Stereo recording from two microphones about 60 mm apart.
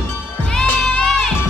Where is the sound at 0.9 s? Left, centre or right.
Centre.